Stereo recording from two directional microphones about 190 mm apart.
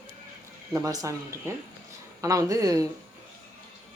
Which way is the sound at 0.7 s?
15° right (ahead or behind).